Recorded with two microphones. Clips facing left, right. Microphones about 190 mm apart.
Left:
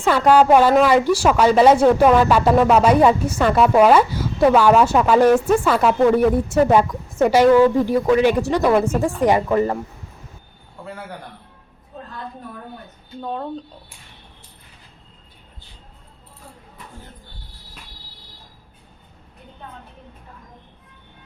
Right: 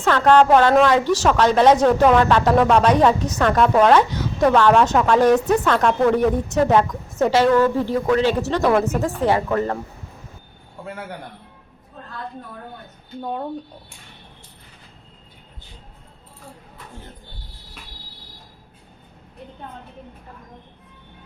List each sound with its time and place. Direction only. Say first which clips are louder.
0.0 s a woman's voice: even; 10° left (ahead or behind)
13.2 s speech: even; 10° right (ahead or behind)